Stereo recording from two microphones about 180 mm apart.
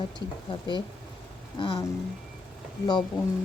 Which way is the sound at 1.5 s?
30° left (ahead or behind).